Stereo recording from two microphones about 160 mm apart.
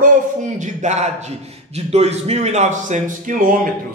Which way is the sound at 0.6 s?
45° right (ahead or behind).